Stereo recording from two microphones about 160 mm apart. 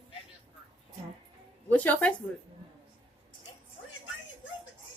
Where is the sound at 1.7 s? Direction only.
10° left (ahead or behind).